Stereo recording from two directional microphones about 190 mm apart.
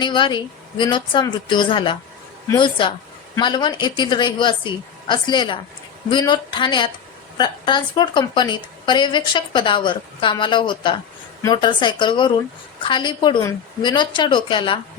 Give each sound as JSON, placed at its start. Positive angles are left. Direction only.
{"t": 0.0, "sound": "a woman's voice", "side_deg": 25}